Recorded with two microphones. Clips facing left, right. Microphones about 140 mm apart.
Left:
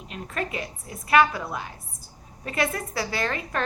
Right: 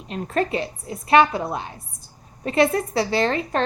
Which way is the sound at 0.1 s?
35° right (ahead or behind).